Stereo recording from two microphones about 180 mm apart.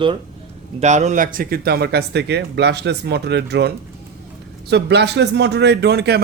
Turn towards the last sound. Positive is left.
turn(degrees=-65)  # may be behind; listen again after turning